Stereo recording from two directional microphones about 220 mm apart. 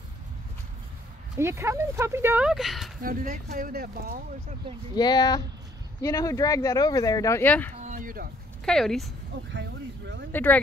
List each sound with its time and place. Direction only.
1.4 s speech: 10° right (ahead or behind)
3.0 s speech: 40° right (ahead or behind)
4.9 s speech: 15° left (ahead or behind)
7.7 s a sound: 35° right (ahead or behind)
8.6 s speech: centre (ahead or behind)
9.5 s speech: 55° right (ahead or behind)
10.3 s speech: 5° left (ahead or behind)